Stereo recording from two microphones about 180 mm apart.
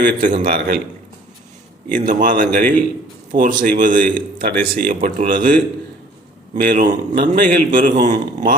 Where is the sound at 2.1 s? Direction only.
45° right (ahead or behind).